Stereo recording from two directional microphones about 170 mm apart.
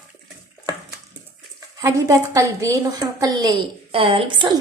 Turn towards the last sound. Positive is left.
turn(degrees=-30)  # may be behind; listen again after turning